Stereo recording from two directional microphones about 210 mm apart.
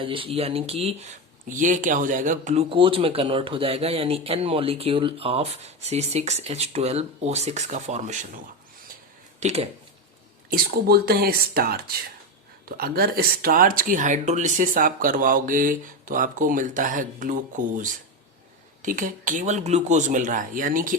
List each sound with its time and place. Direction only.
0.0 s speech: 25° right (ahead or behind)
9.4 s speech: 30° right (ahead or behind)
10.5 s speech: 45° right (ahead or behind)